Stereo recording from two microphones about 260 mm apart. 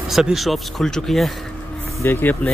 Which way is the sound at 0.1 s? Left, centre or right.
Centre.